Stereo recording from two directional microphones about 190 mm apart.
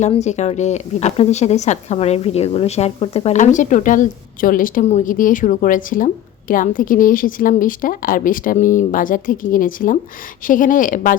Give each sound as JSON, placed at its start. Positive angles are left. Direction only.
{"t": 0.0, "sound": "a woman's voice", "side_deg": 35}